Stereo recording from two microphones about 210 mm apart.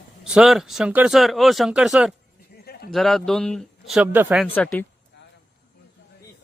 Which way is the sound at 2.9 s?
Centre (ahead or behind).